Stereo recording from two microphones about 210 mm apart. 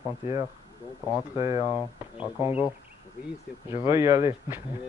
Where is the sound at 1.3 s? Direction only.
15° right (ahead or behind).